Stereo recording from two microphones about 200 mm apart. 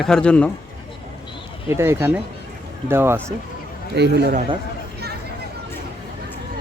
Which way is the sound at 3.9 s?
55° right (ahead or behind).